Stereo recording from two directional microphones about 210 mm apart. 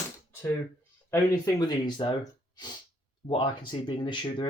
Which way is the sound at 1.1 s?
15° left (ahead or behind).